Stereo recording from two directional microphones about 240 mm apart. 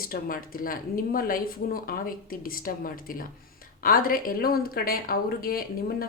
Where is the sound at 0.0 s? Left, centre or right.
Left.